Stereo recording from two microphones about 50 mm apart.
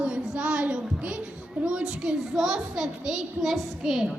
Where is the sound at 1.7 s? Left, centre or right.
Centre.